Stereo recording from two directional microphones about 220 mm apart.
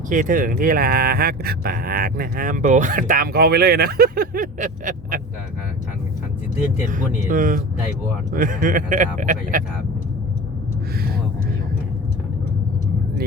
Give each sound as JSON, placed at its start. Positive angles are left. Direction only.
{"t": 0.1, "sound": "speech", "side_deg": -35}
{"t": 6.9, "sound": "speech", "side_deg": -35}